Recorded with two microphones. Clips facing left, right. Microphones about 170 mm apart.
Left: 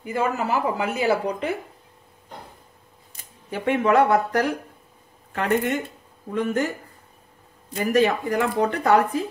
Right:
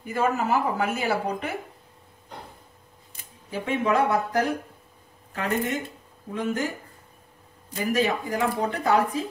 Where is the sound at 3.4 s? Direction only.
65° left (ahead or behind).